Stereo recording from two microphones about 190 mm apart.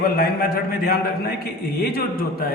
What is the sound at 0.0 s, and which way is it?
Speech, 50° left (ahead or behind).